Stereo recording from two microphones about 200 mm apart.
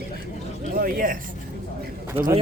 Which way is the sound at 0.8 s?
45° right (ahead or behind).